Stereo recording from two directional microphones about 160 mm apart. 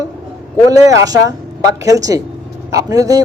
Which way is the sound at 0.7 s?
20° right (ahead or behind).